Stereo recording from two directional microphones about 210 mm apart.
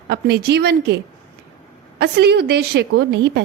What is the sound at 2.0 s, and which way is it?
A woman's voice, 50° right (ahead or behind).